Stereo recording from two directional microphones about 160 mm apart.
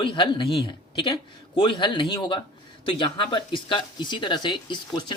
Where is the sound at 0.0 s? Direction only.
30° left (ahead or behind).